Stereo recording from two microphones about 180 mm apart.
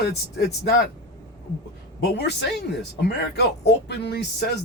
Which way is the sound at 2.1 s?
70° left (ahead or behind).